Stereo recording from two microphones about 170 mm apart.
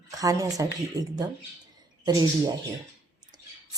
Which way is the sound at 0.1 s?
20° right (ahead or behind).